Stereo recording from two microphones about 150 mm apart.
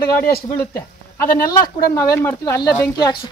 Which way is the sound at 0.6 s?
15° left (ahead or behind).